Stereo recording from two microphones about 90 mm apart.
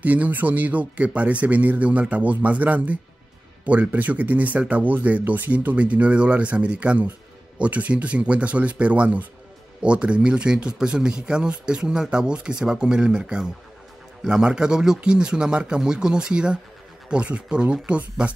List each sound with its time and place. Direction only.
0.0 s speech: 20° right (ahead or behind)